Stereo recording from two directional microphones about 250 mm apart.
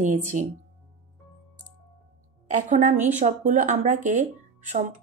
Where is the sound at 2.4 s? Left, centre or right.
Right.